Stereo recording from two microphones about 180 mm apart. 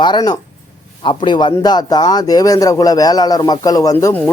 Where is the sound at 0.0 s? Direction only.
25° left (ahead or behind).